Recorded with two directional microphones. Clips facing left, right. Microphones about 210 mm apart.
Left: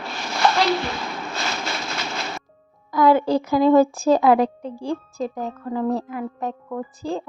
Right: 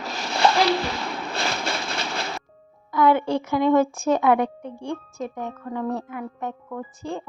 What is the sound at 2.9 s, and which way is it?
A woman's voice, 35° left (ahead or behind).